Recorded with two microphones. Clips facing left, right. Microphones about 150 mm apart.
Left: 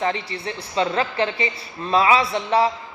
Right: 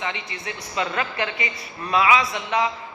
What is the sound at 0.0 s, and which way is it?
Speech, 35° left (ahead or behind).